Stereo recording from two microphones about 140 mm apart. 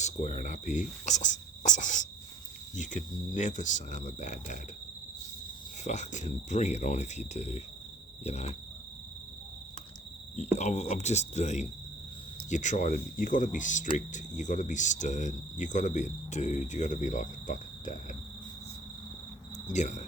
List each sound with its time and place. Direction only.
0.0 s speech: 60° left (ahead or behind)
5.8 s speech: 55° left (ahead or behind)
8.2 s cricket: 50° left (ahead or behind)
10.3 s speech: 55° left (ahead or behind)
19.6 s speech: 60° left (ahead or behind)